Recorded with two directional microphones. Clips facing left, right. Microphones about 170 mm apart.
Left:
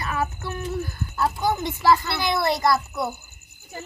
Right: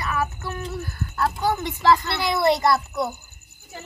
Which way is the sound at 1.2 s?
10° left (ahead or behind).